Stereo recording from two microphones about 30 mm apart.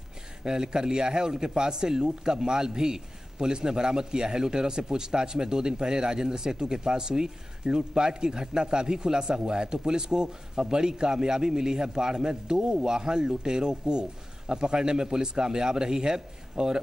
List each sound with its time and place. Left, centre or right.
0.4 s speech: right